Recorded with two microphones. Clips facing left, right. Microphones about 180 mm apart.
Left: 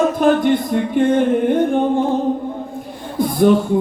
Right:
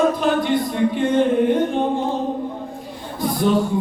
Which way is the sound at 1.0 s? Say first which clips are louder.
Left 6 dB; 50° left (ahead or behind).